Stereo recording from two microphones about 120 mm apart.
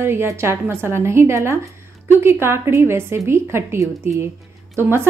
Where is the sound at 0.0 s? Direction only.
20° right (ahead or behind).